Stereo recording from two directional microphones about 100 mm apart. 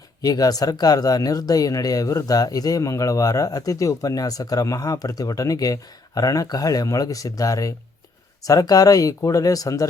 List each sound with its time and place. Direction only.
0.2 s speech: 40° left (ahead or behind)